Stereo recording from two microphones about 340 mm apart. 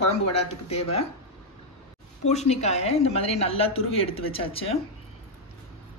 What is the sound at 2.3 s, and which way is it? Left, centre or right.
Speech, centre.